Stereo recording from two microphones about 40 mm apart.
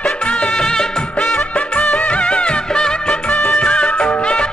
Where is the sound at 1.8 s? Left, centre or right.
Left.